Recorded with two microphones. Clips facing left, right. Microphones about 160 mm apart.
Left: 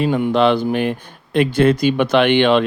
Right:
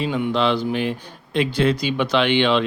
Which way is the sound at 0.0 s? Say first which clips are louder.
Left 5 dB; 55° left (ahead or behind).